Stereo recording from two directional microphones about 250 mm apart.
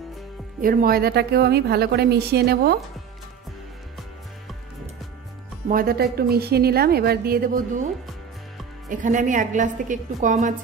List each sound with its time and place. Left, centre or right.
0.6 s a woman's voice: right
5.7 s a woman's voice: right